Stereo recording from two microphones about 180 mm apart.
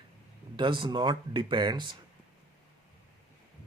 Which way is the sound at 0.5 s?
25° right (ahead or behind).